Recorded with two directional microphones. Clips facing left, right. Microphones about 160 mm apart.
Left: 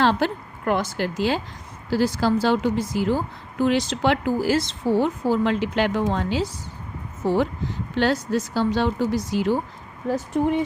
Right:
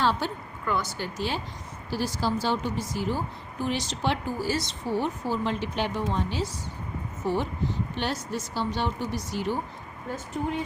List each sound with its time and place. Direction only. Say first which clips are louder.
0.0 s speech: left 6 dB; 90° left